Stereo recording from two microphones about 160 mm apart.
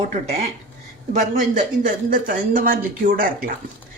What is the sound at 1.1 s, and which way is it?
Speech, 55° right (ahead or behind).